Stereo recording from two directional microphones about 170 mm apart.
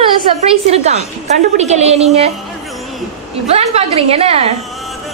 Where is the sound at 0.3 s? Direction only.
40° right (ahead or behind).